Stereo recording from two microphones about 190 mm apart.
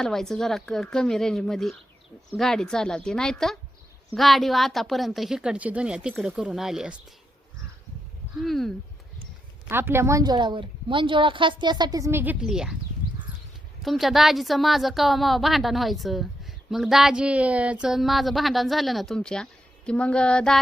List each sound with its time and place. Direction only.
0.0 s a woman's voice: centre (ahead or behind)
8.4 s a woman's voice: centre (ahead or behind)
9.6 s a woman's voice: 10° right (ahead or behind)
13.8 s a woman's voice: centre (ahead or behind)